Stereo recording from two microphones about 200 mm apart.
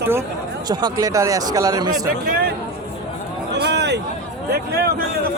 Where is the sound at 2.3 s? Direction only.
50° right (ahead or behind).